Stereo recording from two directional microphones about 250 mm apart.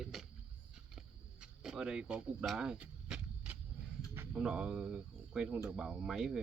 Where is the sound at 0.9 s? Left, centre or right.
Centre.